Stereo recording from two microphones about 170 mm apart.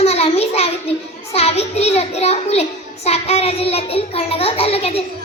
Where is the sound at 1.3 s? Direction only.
40° left (ahead or behind).